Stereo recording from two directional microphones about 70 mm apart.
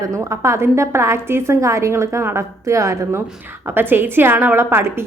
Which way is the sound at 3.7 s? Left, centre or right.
Right.